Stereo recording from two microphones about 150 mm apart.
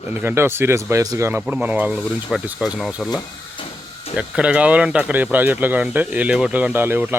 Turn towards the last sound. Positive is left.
turn(degrees=-15)  # may be behind; listen again after turning